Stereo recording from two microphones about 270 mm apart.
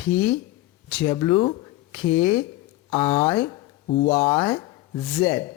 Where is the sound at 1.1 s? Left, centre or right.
Centre.